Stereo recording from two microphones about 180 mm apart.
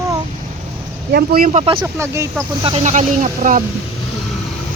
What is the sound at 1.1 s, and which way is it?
Speech, 60° right (ahead or behind).